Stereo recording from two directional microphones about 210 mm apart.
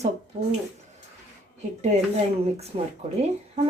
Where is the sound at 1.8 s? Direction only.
35° right (ahead or behind).